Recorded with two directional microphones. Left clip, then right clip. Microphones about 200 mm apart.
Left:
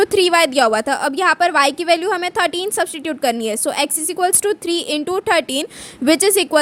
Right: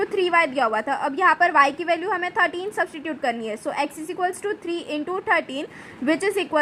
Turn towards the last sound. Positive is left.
turn(degrees=70)  # may be behind; listen again after turning